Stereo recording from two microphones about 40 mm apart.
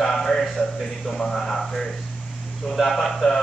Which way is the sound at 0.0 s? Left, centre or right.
Centre.